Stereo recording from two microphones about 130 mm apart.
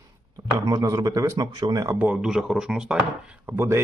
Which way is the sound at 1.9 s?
10° right (ahead or behind).